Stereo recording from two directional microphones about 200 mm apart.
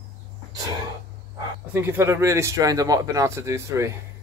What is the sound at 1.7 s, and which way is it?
Speech, 10° right (ahead or behind).